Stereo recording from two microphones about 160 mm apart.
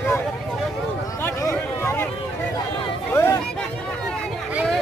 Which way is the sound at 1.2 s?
15° left (ahead or behind).